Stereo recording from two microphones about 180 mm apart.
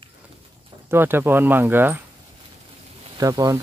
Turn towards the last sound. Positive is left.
turn(degrees=-20)  # may be behind; listen again after turning